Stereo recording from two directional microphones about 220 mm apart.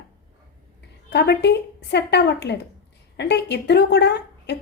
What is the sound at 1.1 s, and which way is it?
A woman's voice, 50° left (ahead or behind).